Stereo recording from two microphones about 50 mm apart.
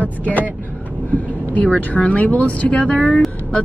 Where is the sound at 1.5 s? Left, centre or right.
Left.